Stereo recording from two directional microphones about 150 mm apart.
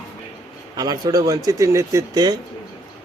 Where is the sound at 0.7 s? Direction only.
25° right (ahead or behind).